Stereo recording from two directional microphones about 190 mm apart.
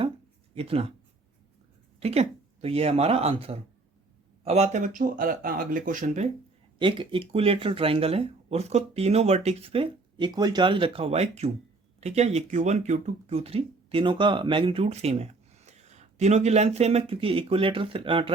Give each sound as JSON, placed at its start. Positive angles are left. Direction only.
{"t": 0.5, "sound": "speech", "side_deg": -30}
{"t": 2.0, "sound": "speech", "side_deg": -35}
{"t": 6.7, "sound": "speech", "side_deg": -25}